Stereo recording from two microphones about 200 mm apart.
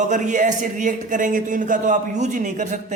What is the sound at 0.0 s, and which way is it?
A man's voice, 40° right (ahead or behind).